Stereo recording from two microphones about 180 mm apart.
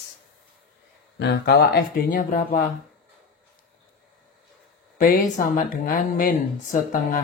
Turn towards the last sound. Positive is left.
turn(degrees=50)  # may be behind; listen again after turning